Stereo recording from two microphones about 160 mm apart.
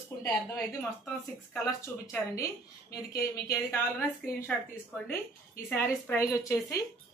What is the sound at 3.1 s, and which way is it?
A woman's voice, 15° left (ahead or behind).